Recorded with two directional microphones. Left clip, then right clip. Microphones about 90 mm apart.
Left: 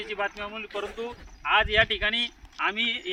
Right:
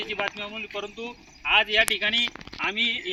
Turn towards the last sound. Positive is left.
turn(degrees=-15)  # may be behind; listen again after turning